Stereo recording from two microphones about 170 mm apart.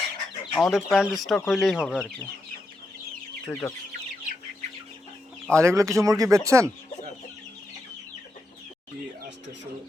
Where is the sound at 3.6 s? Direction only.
15° left (ahead or behind).